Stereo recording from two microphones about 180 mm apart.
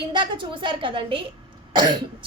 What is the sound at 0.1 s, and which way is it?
A woman's voice, 25° right (ahead or behind).